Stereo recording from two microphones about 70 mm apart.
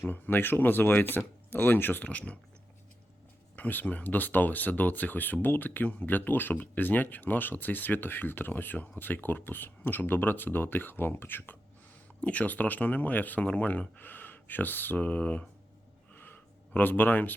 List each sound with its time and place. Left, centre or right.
0.0 s speech: left
3.5 s speech: left
12.2 s speech: left
16.1 s a sound: left